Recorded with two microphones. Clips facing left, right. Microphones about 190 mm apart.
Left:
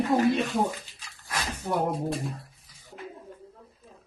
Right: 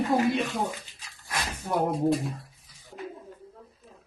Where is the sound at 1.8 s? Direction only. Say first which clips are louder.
Right 8 dB; centre (ahead or behind).